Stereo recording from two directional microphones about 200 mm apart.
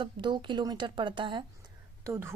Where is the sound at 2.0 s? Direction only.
10° right (ahead or behind).